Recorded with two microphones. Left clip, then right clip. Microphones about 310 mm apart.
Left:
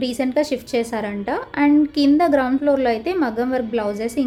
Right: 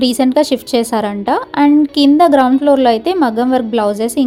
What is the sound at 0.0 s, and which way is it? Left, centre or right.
A woman's voice, centre.